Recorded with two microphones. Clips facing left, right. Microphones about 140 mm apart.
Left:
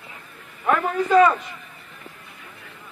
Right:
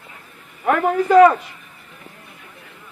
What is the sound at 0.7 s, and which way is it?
Speech, 65° right (ahead or behind).